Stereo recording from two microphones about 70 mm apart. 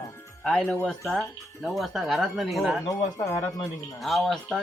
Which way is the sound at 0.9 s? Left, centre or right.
Centre.